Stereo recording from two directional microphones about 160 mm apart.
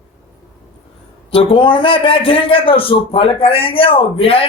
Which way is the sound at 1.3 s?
35° left (ahead or behind).